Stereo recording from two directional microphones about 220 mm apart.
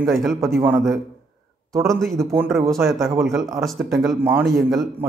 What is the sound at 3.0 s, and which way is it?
Speech, centre (ahead or behind).